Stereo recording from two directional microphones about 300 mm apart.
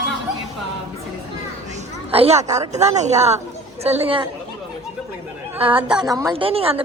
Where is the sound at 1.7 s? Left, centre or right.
Right.